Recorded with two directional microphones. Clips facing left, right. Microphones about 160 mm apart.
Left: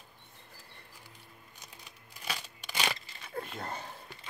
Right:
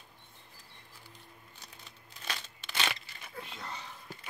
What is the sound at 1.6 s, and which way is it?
Crumpling, 15° left (ahead or behind).